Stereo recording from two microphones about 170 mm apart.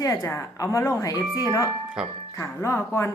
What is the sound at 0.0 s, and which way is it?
Speech, 15° left (ahead or behind).